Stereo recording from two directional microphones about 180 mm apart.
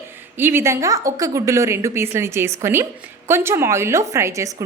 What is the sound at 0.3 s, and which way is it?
A woman's voice, 10° right (ahead or behind).